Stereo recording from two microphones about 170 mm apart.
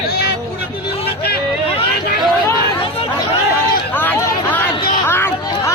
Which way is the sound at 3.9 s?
10° left (ahead or behind).